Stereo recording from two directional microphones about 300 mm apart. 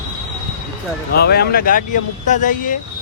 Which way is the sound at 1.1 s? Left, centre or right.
Left.